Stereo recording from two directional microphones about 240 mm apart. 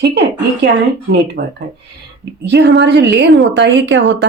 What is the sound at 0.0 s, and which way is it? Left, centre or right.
A woman's voice, right.